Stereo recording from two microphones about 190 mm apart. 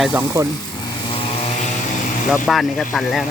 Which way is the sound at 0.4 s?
15° right (ahead or behind).